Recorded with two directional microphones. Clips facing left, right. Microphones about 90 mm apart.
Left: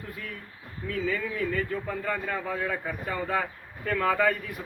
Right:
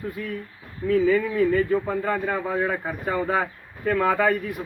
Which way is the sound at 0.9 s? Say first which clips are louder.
Right 10 dB; 35° right (ahead or behind).